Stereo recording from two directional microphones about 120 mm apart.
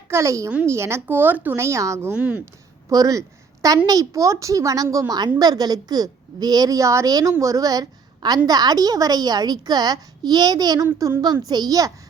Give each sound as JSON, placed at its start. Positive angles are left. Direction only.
{"t": 0.1, "sound": "a woman's voice", "side_deg": -25}
{"t": 2.1, "sound": "speech", "side_deg": -10}
{"t": 2.9, "sound": "a woman's voice", "side_deg": -30}